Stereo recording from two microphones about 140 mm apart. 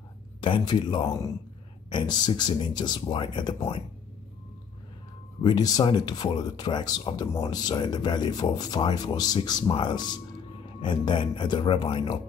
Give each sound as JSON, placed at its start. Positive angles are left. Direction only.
{"t": 0.4, "sound": "speech", "side_deg": 35}
{"t": 5.4, "sound": "speech", "side_deg": 30}